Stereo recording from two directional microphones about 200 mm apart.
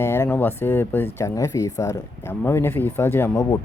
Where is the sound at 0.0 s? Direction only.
10° left (ahead or behind).